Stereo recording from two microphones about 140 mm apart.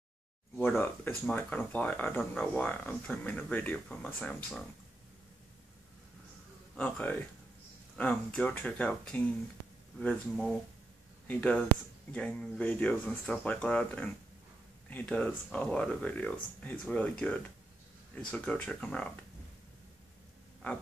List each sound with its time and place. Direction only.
0.6 s speech: 15° left (ahead or behind)
6.8 s speech: 10° left (ahead or behind)